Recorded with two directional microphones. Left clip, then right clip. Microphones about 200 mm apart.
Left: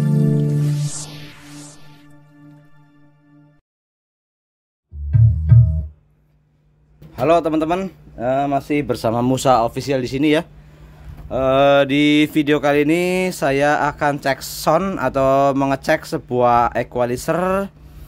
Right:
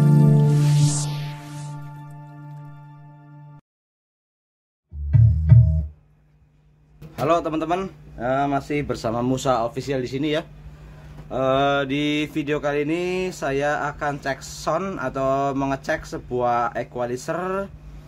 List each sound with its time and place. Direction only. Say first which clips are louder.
0.0 s music: even; centre (ahead or behind)
7.2 s mantra: left 5 dB; 40° left (ahead or behind)